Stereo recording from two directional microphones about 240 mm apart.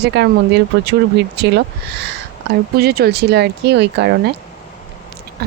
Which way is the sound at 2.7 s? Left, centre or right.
Right.